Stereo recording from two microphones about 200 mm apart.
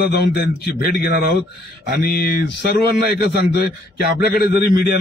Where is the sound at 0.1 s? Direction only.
50° left (ahead or behind).